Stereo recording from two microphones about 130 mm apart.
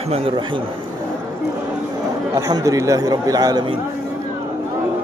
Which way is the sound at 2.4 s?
30° right (ahead or behind).